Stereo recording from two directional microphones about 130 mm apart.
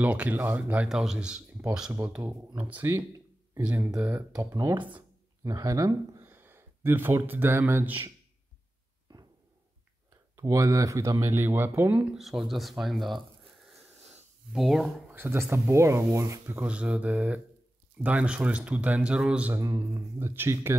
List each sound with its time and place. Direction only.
0.0 s speech: 10° right (ahead or behind)
4.4 s speech: 25° right (ahead or behind)
10.3 s speech: 25° right (ahead or behind)
12.2 s speech: centre (ahead or behind)
14.5 s speech: centre (ahead or behind)
15.0 s speech: 15° right (ahead or behind)
19.5 s speech: 25° right (ahead or behind)